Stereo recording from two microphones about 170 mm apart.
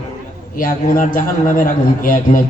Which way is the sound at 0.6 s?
50° left (ahead or behind).